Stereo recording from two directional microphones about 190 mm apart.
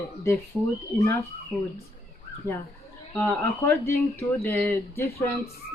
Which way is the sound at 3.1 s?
15° left (ahead or behind).